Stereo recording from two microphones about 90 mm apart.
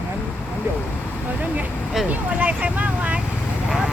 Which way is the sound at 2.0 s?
15° right (ahead or behind).